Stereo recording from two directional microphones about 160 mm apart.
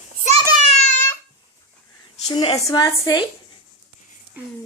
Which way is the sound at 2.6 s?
20° left (ahead or behind).